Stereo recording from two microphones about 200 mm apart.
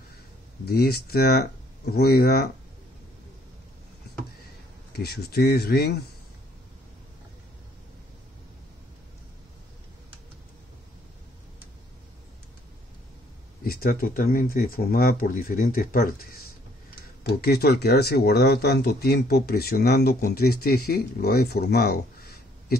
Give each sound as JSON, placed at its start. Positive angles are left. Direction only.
{"t": 0.7, "sound": "speech", "side_deg": 50}
{"t": 4.9, "sound": "speech", "side_deg": 55}
{"t": 13.7, "sound": "speech", "side_deg": 45}